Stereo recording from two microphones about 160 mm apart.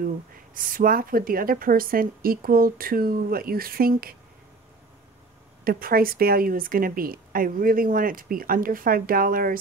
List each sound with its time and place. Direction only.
0.6 s speech: 60° right (ahead or behind)
5.6 s speech: 65° right (ahead or behind)